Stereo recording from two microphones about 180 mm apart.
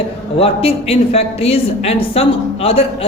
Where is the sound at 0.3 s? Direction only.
30° left (ahead or behind).